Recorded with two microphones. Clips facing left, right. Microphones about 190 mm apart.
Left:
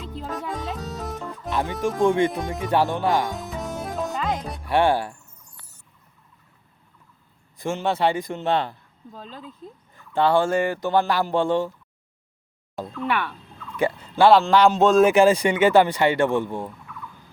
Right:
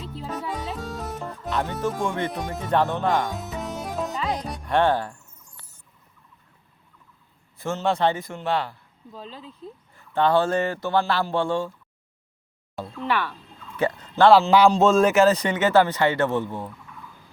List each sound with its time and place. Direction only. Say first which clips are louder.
0.3 s music: even; centre (ahead or behind)
1.5 s music: left 1 dB; 10° left (ahead or behind)
2.0 s speech: left 7 dB; 15° left (ahead or behind)
3.2 s music: left 1 dB; centre (ahead or behind)
7.6 s a man's voice: even; 15° left (ahead or behind)
9.3 s speech: left 2 dB; 45° left (ahead or behind)
9.9 s speech: left 1 dB; 10° left (ahead or behind)
13.7 s dog: left 1 dB; 10° left (ahead or behind)
14.3 s speech: even; 5° right (ahead or behind)
15.0 s speech: left 2 dB; 10° left (ahead or behind)